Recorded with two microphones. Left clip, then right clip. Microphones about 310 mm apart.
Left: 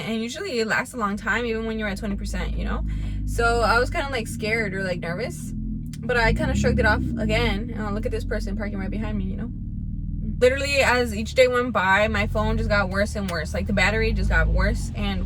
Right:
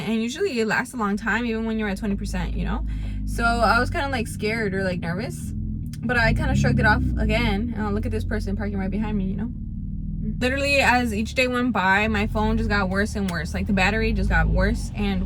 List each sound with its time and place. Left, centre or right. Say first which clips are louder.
0.0 s a woman's voice: right 4 dB; centre
10.4 s a woman's voice: left 1 dB; centre